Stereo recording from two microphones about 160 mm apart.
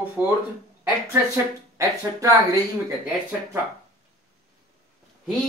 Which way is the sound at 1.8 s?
20° right (ahead or behind).